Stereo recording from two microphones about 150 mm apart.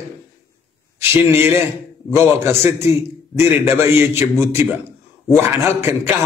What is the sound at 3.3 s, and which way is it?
A man's voice, 15° right (ahead or behind).